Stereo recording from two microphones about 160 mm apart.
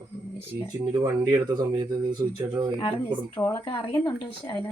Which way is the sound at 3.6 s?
35° left (ahead or behind).